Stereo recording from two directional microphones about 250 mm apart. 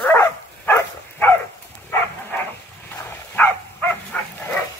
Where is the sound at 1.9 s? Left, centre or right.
Centre.